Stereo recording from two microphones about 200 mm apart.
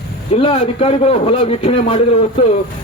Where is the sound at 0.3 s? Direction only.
25° left (ahead or behind).